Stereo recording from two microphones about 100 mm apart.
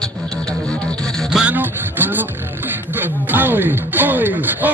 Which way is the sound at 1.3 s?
15° right (ahead or behind).